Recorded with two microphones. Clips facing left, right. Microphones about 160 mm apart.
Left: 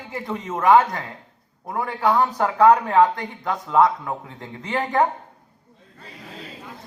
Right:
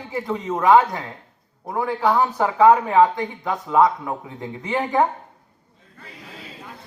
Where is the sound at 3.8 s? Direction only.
15° right (ahead or behind).